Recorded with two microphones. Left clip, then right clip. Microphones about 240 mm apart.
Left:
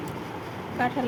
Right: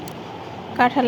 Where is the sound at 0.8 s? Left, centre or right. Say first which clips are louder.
Right 9 dB; centre.